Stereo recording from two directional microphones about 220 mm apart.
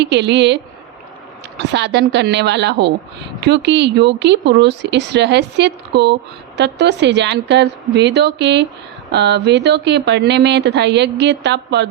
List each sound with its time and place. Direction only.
0.0 s speech: 50° right (ahead or behind)